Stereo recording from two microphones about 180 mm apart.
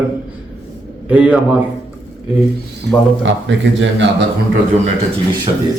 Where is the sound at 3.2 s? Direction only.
90° right.